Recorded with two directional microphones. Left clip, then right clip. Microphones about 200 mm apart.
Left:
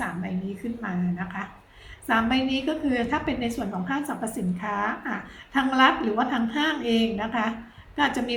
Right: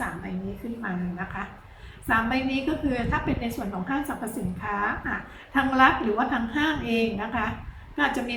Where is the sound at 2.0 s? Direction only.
35° left (ahead or behind).